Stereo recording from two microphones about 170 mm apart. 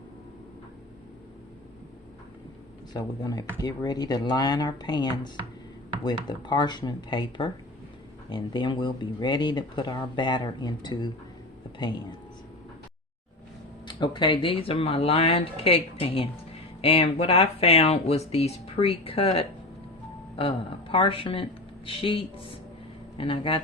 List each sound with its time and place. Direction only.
2.9 s speech: 20° left (ahead or behind)
13.8 s speech: 25° left (ahead or behind)